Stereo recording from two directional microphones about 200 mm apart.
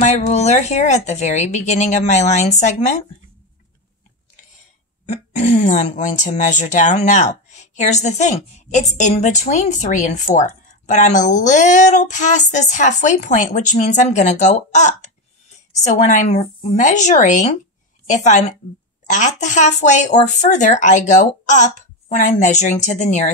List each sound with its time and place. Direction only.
0.0 s speech: 35° left (ahead or behind)
5.0 s speech: 35° left (ahead or behind)